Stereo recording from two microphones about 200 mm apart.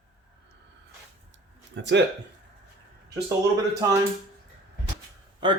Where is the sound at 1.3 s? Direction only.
60° right (ahead or behind).